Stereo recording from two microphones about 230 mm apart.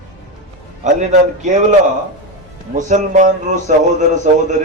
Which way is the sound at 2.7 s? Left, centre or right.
Right.